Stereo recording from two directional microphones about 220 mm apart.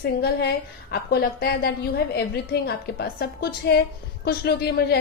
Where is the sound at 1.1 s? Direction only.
45° left (ahead or behind).